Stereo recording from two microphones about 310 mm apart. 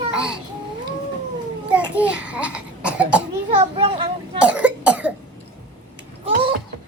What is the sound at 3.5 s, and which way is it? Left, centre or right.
Speech, centre.